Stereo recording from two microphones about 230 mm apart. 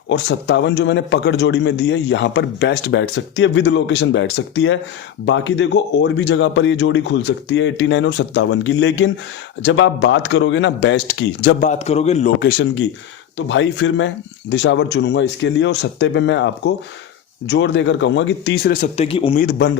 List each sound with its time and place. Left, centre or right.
0.1 s a man's voice: left
11.6 s a man's voice: left
12.4 s a man's voice: left
19.5 s a man's voice: left